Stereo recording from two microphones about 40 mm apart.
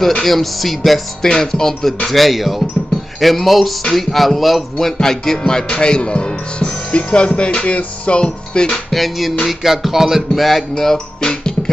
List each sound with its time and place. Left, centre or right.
0.2 s speech: centre
1.2 s music: centre
2.0 s speech: centre
4.9 s music: centre
5.5 s speech: centre
8.6 s speech: centre
9.4 s music: centre
10.4 s music: centre